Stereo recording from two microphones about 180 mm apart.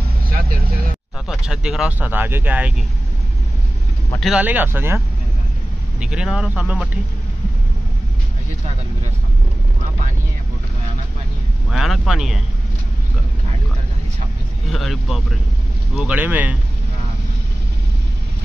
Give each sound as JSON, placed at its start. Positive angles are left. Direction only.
{"t": 0.3, "sound": "speech", "side_deg": -55}
{"t": 1.2, "sound": "speech", "side_deg": -5}
{"t": 4.2, "sound": "speech", "side_deg": -5}
{"t": 11.7, "sound": "speech", "side_deg": 0}
{"t": 14.7, "sound": "speech", "side_deg": 0}